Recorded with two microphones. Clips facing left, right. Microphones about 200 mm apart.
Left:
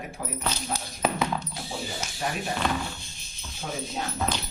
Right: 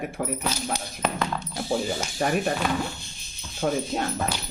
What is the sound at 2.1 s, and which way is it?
Speech, 55° right (ahead or behind).